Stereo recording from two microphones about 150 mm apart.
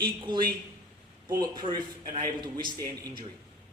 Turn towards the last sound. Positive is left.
turn(degrees=-25)  # may be behind; listen again after turning